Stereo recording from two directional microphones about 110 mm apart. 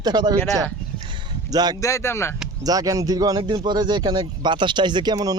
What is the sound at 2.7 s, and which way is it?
Speech, 35° right (ahead or behind).